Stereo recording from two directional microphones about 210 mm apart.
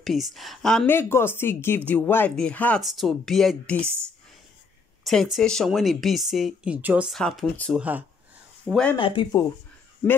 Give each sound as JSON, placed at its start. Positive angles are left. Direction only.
{"t": 0.0, "sound": "speech", "side_deg": 0}
{"t": 5.0, "sound": "speech", "side_deg": 0}
{"t": 8.9, "sound": "speech", "side_deg": 25}